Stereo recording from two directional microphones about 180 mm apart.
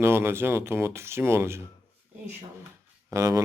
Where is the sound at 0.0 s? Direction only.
15° right (ahead or behind).